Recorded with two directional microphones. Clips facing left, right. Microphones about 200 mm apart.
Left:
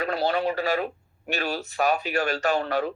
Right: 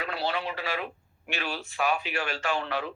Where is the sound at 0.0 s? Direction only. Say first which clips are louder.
Left 7 dB; 40° left (ahead or behind).